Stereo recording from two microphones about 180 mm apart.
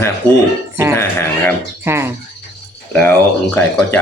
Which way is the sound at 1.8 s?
15° right (ahead or behind).